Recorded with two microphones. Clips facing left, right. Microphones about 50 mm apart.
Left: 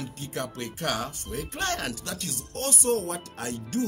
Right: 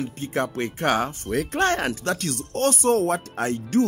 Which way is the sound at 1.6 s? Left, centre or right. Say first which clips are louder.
Right 7 dB; right.